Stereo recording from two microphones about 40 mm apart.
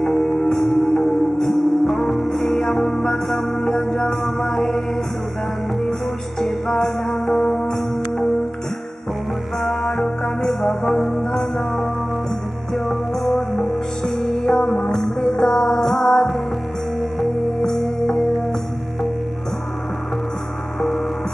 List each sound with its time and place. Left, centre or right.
0.0 s music: centre
0.6 s music: centre
6.4 s music: centre
9.6 s music: centre
14.1 s music: centre